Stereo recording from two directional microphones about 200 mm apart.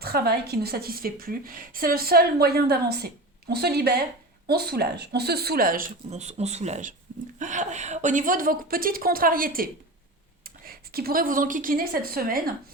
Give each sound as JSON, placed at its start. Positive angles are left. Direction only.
{"t": 0.0, "sound": "a woman's voice", "side_deg": -50}